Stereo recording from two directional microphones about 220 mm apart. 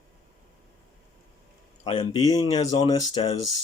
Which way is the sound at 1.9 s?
25° left (ahead or behind).